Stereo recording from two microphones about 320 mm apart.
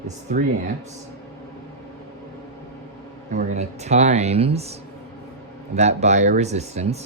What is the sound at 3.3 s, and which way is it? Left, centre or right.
Speech, right.